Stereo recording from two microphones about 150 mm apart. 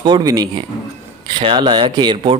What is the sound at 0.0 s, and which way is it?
Speech, 25° right (ahead or behind).